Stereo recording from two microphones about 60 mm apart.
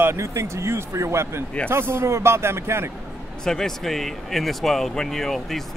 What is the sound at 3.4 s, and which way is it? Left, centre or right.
Speech, centre.